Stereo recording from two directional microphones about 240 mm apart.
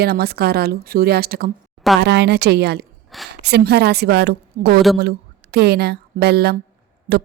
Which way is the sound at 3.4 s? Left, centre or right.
Right.